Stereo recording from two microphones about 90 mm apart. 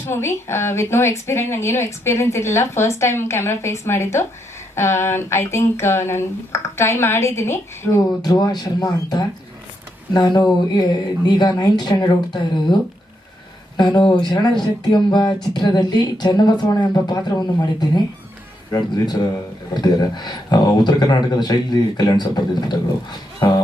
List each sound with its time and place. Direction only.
0.1 s a woman's voice: 30° left (ahead or behind)
8.2 s speech: 45° left (ahead or behind)
13.7 s speech: 55° left (ahead or behind)